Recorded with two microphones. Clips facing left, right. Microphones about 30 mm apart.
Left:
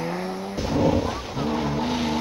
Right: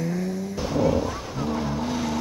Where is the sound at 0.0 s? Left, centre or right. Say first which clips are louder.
Even; left.